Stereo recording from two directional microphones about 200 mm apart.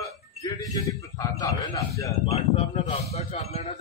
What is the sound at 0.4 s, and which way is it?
A man's voice, 15° left (ahead or behind).